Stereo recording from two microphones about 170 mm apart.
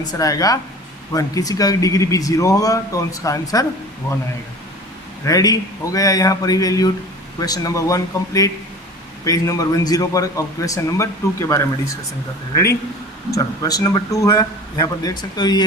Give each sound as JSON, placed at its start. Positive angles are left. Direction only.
{"t": 0.1, "sound": "speech", "side_deg": 20}
{"t": 5.2, "sound": "speech", "side_deg": 20}
{"t": 13.3, "sound": "speech", "side_deg": 20}